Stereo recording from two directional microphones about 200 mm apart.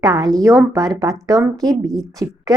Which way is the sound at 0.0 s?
20° right (ahead or behind).